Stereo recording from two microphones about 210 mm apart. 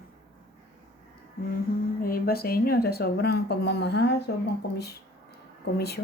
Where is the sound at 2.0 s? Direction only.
45° left (ahead or behind).